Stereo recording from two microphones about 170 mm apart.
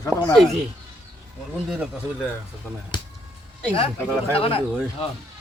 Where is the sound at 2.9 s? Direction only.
25° left (ahead or behind).